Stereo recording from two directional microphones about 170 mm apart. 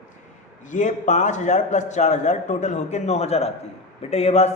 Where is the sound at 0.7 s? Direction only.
45° left (ahead or behind).